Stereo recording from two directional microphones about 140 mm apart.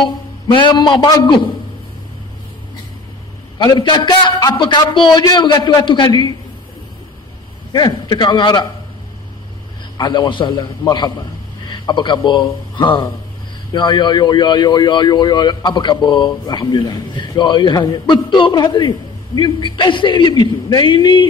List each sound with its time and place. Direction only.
0.6 s a man's voice: 35° left (ahead or behind)
3.5 s a man's voice: 30° left (ahead or behind)
7.7 s a man's voice: 30° left (ahead or behind)
9.9 s a man's voice: 30° left (ahead or behind)